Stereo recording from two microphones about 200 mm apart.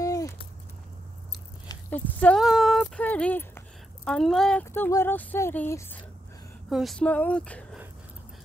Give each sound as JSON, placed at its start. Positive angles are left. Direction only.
{"t": 0.0, "sound": "a sound", "side_deg": 15}
{"t": 1.9, "sound": "speech", "side_deg": 10}
{"t": 6.7, "sound": "speech", "side_deg": 0}